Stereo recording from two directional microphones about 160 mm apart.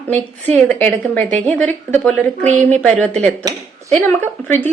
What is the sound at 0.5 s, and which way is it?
Speech, 10° left (ahead or behind).